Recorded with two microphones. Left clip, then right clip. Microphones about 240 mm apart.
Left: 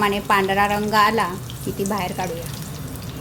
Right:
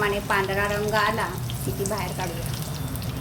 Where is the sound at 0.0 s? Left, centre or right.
Left.